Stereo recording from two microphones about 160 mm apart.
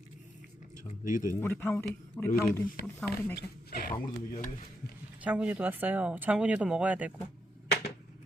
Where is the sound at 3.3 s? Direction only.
70° left (ahead or behind).